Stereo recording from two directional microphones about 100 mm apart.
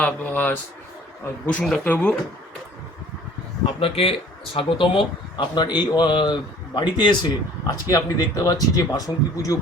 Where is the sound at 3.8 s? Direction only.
75° left (ahead or behind); by 7.1 s 50° left (ahead or behind).